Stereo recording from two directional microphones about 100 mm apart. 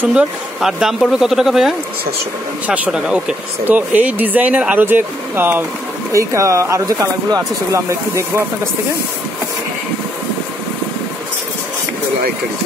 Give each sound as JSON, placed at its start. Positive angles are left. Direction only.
{"t": 0.1, "sound": "speech", "side_deg": -5}
{"t": 2.6, "sound": "speech", "side_deg": -15}
{"t": 6.1, "sound": "speech", "side_deg": -30}